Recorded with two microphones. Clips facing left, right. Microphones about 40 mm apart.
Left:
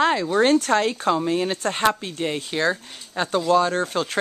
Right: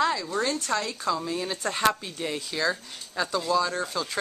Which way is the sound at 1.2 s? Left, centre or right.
Left.